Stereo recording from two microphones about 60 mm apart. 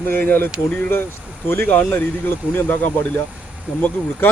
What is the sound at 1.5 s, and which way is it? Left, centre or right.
Speech, left.